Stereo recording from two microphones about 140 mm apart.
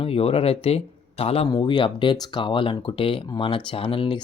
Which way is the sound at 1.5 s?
30° left (ahead or behind).